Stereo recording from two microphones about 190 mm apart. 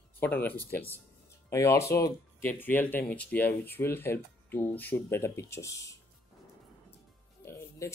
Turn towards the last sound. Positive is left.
turn(degrees=15)  # may be behind; listen again after turning